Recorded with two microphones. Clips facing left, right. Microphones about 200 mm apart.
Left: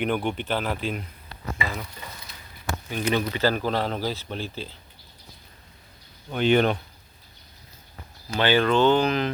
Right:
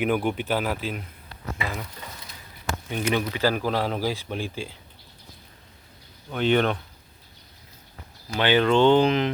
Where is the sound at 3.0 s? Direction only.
10° right (ahead or behind).